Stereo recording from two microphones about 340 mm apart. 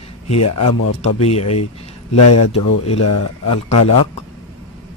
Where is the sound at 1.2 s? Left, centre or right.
Centre.